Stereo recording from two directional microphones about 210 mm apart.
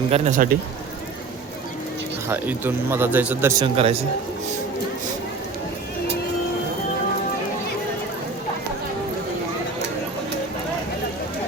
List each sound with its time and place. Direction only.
0.1 s speech: 35° right (ahead or behind)
2.3 s speech: 10° right (ahead or behind)
3.6 s speech: 25° right (ahead or behind)